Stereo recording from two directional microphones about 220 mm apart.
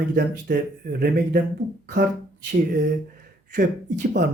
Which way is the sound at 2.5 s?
45° right (ahead or behind).